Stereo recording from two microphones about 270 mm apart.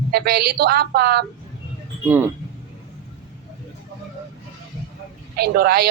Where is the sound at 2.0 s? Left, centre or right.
Centre.